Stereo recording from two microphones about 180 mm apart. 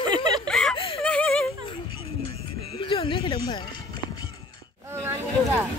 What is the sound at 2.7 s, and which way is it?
Music, 30° left (ahead or behind).